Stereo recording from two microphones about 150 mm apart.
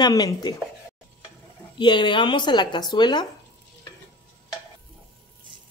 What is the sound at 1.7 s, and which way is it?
A man's voice, 30° left (ahead or behind).